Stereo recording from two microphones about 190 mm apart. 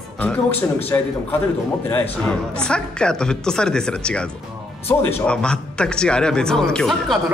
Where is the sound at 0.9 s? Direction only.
15° left (ahead or behind).